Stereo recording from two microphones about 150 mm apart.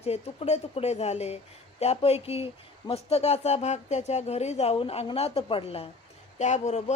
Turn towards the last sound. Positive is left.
turn(degrees=50)  # may be behind; listen again after turning